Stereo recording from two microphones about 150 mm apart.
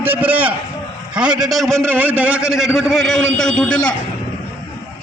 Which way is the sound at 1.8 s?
15° right (ahead or behind).